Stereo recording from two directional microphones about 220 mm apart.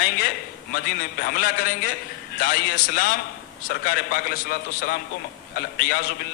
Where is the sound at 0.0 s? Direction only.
40° left (ahead or behind).